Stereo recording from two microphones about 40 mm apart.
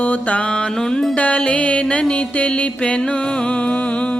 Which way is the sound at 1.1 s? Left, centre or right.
Left.